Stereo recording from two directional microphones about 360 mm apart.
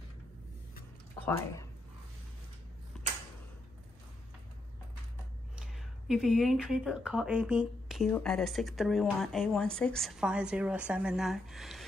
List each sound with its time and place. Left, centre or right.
1.2 s speech: centre
2.9 s tick-tock: centre
5.6 s speech: centre